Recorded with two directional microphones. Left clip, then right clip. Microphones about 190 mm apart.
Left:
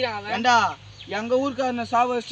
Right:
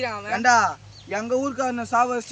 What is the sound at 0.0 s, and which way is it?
Speech, centre (ahead or behind).